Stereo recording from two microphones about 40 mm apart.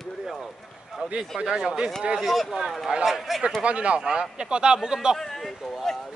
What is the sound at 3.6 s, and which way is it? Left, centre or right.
Speech, right.